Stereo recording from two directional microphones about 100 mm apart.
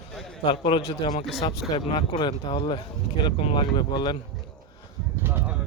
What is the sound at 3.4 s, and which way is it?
Speech, 75° left (ahead or behind).